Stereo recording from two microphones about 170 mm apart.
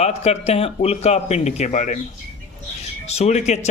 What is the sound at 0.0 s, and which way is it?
A man's voice, 40° left (ahead or behind).